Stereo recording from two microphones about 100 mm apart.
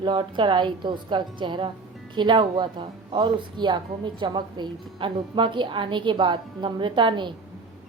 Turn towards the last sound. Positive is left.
turn(degrees=-50)  # may be behind; listen again after turning